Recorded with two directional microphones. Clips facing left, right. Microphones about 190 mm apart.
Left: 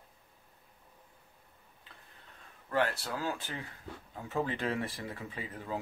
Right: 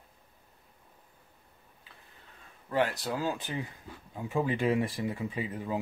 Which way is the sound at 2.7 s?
15° right (ahead or behind).